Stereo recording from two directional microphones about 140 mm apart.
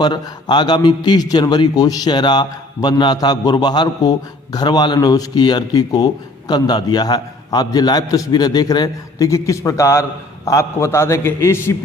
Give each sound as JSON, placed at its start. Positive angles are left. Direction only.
{"t": 0.0, "sound": "a man's voice", "side_deg": 30}